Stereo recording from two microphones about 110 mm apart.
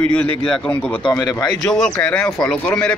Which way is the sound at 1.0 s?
40° left (ahead or behind).